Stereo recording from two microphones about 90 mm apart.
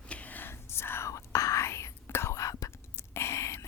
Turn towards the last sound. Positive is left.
turn(degrees=35)  # may be behind; listen again after turning